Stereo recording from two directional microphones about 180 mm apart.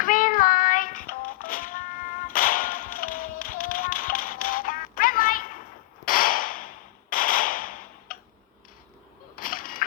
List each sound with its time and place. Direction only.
0.0 s music: 50° left (ahead or behind)
2.2 s tap: 50° left (ahead or behind)
6.1 s whip: 50° left (ahead or behind)
9.4 s a sound: 50° left (ahead or behind)